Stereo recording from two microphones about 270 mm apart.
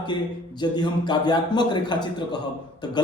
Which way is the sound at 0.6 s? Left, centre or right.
Centre.